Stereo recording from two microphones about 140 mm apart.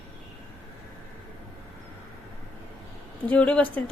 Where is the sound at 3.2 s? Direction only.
10° left (ahead or behind).